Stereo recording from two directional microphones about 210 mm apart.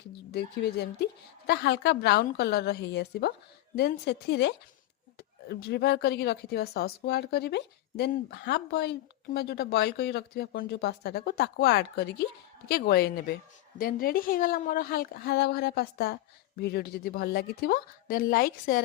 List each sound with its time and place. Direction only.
0.3 s speech: 50° left (ahead or behind)